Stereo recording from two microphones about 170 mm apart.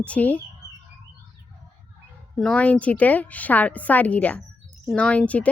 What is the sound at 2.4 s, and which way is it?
A woman's voice, 5° left (ahead or behind).